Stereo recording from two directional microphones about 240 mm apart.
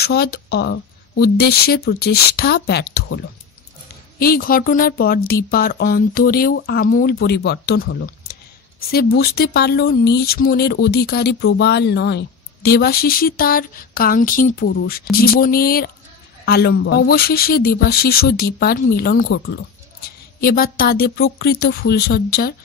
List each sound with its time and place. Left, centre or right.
0.0 s speech: left
4.2 s speech: left